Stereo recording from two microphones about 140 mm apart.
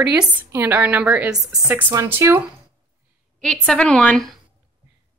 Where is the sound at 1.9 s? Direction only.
20° right (ahead or behind).